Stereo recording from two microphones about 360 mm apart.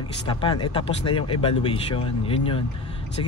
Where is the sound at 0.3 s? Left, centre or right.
Centre.